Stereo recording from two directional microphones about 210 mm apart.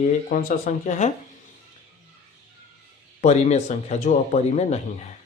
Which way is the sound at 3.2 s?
30° left (ahead or behind).